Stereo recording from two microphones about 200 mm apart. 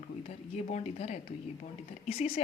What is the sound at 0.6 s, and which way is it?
Speech, 35° left (ahead or behind).